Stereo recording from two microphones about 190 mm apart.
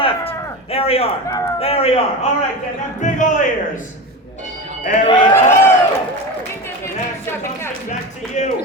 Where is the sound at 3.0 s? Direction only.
40° left (ahead or behind).